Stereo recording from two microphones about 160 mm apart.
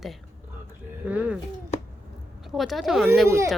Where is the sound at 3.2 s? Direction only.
15° right (ahead or behind).